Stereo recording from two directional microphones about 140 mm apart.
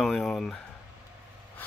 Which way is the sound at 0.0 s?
5° left (ahead or behind).